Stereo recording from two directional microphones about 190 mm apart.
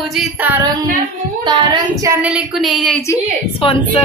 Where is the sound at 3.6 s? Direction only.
30° left (ahead or behind).